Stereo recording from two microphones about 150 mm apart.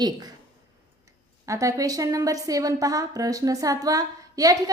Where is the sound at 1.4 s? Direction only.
20° right (ahead or behind).